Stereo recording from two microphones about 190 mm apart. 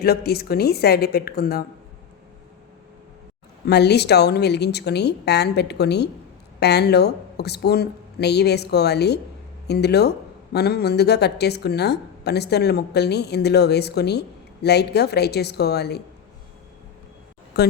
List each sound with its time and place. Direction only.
0.0 s a woman's voice: 55° left (ahead or behind)
3.7 s a woman's voice: 60° left (ahead or behind)
17.5 s a woman's voice: 60° left (ahead or behind)